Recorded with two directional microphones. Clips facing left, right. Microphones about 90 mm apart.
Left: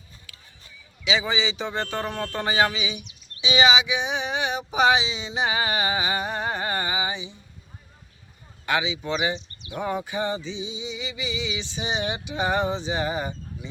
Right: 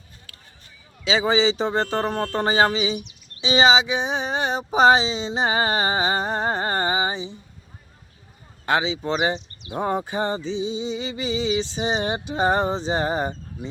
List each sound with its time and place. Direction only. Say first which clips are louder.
0.3 s a sound: right 2 dB; 45° right (ahead or behind)
1.0 s speech: right 6 dB; 35° right (ahead or behind)
8.6 s speech: right 3 dB; 35° right (ahead or behind)